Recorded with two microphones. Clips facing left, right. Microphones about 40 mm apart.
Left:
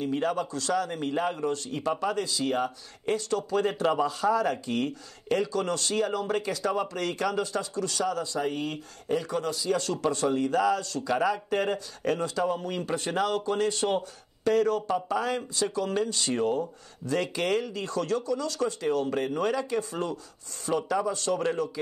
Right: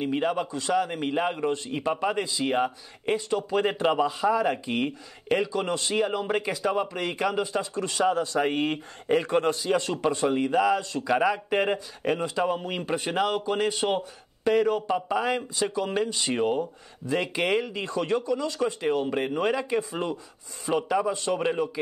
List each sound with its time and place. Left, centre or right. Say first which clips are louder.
0.2 s speech: right 2 dB; centre; by 9.8 s right
9.8 s speech: right 2 dB; right